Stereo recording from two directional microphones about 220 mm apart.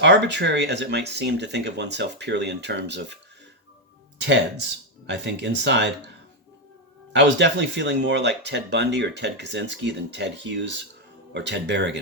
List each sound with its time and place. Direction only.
0.0 s speech: 50° right (ahead or behind)
5.0 s speech: 50° right (ahead or behind)
7.1 s speech: 55° right (ahead or behind)